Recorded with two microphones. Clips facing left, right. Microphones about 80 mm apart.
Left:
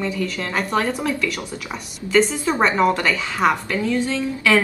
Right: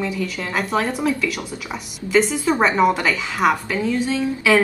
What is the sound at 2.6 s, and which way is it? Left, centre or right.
Speech, centre.